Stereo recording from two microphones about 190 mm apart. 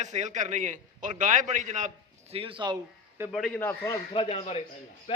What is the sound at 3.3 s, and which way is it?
Speech, centre (ahead or behind).